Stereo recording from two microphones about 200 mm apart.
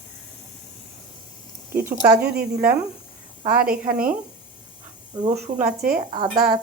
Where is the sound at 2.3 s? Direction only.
45° right (ahead or behind).